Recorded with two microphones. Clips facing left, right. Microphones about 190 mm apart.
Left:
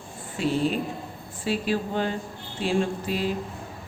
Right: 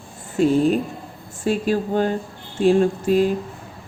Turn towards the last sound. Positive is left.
turn(degrees=-45)  # may be behind; listen again after turning